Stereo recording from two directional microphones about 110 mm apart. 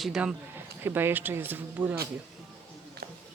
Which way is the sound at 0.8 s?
20° right (ahead or behind).